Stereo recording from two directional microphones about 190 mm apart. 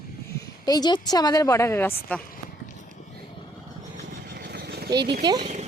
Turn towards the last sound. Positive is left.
turn(degrees=-20)  # may be behind; listen again after turning